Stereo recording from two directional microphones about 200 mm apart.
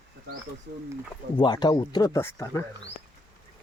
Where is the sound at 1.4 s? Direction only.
20° left (ahead or behind).